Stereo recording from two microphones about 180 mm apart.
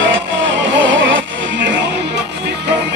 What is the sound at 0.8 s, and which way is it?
Music, 90° right.